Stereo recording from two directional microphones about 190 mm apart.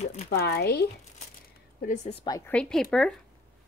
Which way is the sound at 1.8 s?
35° left (ahead or behind).